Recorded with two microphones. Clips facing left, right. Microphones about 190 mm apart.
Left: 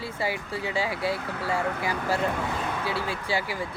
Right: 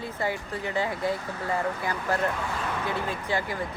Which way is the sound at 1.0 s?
80° left.